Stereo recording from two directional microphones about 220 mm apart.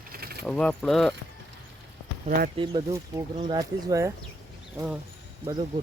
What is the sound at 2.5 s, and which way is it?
Speech, 20° right (ahead or behind).